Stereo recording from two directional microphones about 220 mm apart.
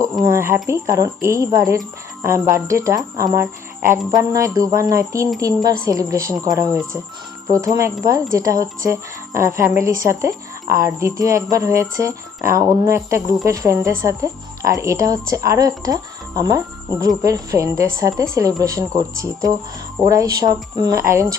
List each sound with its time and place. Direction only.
0.3 s speech: 10° right (ahead or behind)
3.3 s a sound: 10° right (ahead or behind)
4.2 s speech: 15° right (ahead or behind)